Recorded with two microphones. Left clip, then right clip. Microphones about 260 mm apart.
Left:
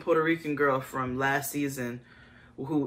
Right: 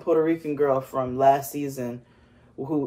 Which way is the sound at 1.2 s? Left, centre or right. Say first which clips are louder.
Right 10 dB; centre.